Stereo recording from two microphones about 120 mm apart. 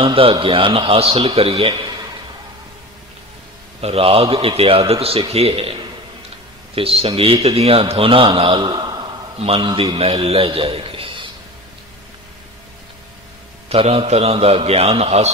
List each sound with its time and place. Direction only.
0.0 s a man's voice: 45° right (ahead or behind)
3.8 s a man's voice: 55° right (ahead or behind); by 9.0 s 35° right (ahead or behind)
9.4 s a man's voice: 55° right (ahead or behind)
13.7 s a man's voice: 55° right (ahead or behind)